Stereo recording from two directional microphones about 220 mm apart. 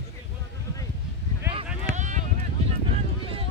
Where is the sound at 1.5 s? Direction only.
30° right (ahead or behind).